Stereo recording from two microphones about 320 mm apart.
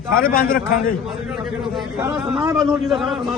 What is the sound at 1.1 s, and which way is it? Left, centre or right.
A man's voice, centre.